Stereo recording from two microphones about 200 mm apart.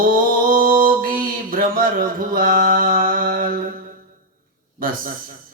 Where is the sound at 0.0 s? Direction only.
45° right (ahead or behind).